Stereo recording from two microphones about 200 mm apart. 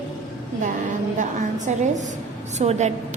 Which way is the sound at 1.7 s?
40° right (ahead or behind).